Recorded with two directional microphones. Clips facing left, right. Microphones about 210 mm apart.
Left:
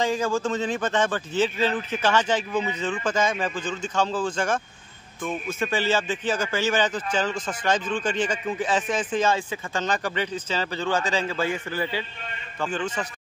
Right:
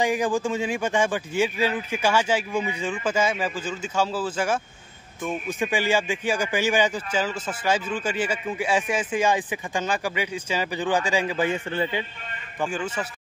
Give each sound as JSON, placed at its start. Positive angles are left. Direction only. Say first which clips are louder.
{"t": 0.0, "sound": "speech", "louder": "right 1 dB", "side_deg": -15}
{"t": 12.5, "sound": "speech", "louder": "even", "side_deg": -10}